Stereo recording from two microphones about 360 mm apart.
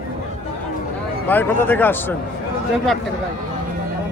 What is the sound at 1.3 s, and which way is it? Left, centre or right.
Speech, centre.